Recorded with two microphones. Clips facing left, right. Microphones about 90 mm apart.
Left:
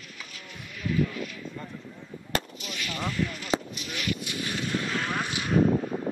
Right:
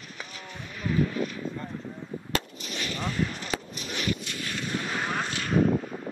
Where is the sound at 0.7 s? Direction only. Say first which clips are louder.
Right 1 dB; 35° right (ahead or behind).